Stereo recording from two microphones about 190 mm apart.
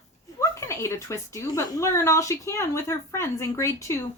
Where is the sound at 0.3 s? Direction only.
15° left (ahead or behind).